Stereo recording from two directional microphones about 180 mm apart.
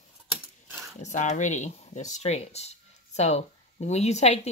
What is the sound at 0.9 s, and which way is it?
Speech, 40° left (ahead or behind).